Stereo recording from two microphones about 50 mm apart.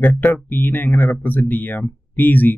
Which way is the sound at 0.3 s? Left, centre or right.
Left.